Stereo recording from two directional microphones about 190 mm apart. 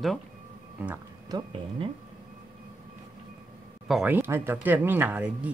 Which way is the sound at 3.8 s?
5° right (ahead or behind).